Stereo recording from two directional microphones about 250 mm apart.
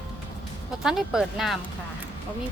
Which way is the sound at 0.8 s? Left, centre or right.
Centre.